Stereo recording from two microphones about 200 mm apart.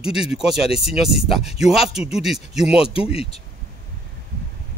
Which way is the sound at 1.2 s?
30° left (ahead or behind).